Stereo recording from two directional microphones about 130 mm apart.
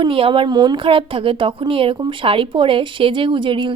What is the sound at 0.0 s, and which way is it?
Speech, 45° right (ahead or behind).